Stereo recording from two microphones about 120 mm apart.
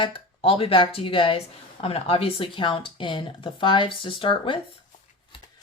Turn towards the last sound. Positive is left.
turn(degrees=45)  # may be behind; listen again after turning